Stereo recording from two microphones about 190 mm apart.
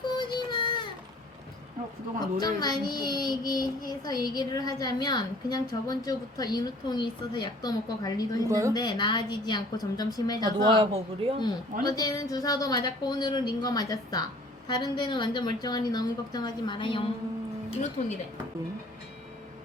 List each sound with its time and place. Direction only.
0.0 s a sound: 25° left (ahead or behind)
2.2 s a child's voice: 20° left (ahead or behind)
8.4 s a woman's voice: 15° right (ahead or behind)
8.7 s a child's voice: 20° left (ahead or behind)
10.7 s speech: 25° right (ahead or behind)
11.9 s a child's voice: 20° left (ahead or behind)
18.0 s speech: 45° left (ahead or behind)